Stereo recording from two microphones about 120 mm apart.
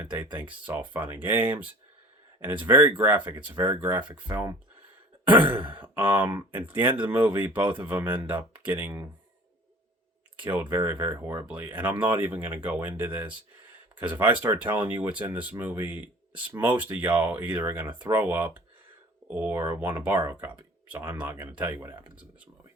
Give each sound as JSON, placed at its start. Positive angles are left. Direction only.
{"t": 0.0, "sound": "speech", "side_deg": -15}
{"t": 5.2, "sound": "sigh", "side_deg": -15}
{"t": 5.6, "sound": "speech", "side_deg": -15}
{"t": 10.3, "sound": "speech", "side_deg": -15}
{"t": 14.9, "sound": "speech", "side_deg": -40}
{"t": 15.3, "sound": "speech", "side_deg": -15}